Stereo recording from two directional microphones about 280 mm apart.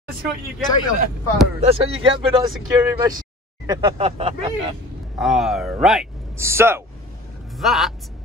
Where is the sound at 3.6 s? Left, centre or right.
Centre.